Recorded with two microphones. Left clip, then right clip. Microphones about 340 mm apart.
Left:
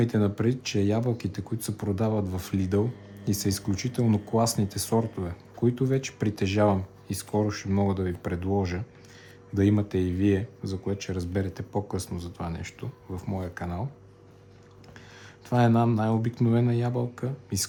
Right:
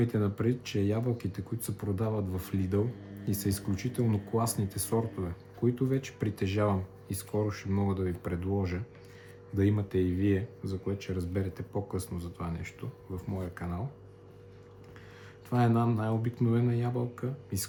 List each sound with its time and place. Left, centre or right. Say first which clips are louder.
0.0 s speech: left 5 dB; left
15.4 s speech: left 5 dB; left